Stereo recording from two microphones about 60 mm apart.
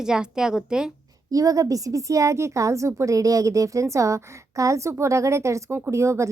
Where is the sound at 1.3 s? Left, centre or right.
Right.